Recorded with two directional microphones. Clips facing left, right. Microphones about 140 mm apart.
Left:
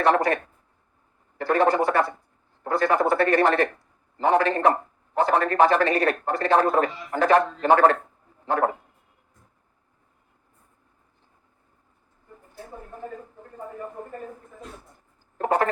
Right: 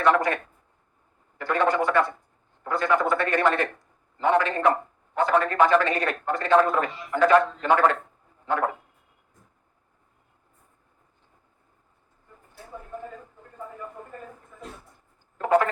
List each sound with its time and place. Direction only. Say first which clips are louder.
0.0 s a man's voice: left 1 dB; 35° left (ahead or behind)
1.4 s a man's voice: left 3 dB; 35° left (ahead or behind)
12.7 s a sound: even; 35° left (ahead or behind)